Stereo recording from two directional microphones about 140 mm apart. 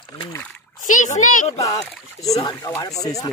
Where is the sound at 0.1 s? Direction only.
25° left (ahead or behind).